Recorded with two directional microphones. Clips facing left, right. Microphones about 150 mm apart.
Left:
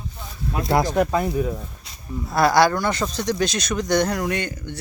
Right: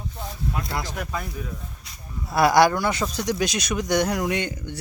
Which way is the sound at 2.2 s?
10° right (ahead or behind).